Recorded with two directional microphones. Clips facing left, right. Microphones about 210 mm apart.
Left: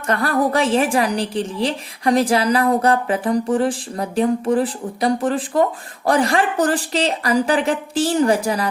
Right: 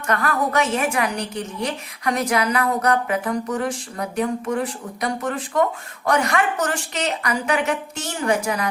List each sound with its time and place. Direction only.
0.1 s a woman's voice: 30° left (ahead or behind)